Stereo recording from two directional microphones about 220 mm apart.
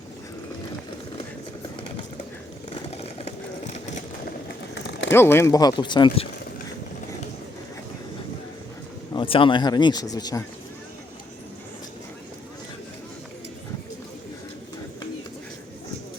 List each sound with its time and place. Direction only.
2.6 s vehicle: 30° left (ahead or behind)
4.7 s a sound: 55° left (ahead or behind)
5.1 s speech: 10° left (ahead or behind)
9.1 s speech: 25° left (ahead or behind)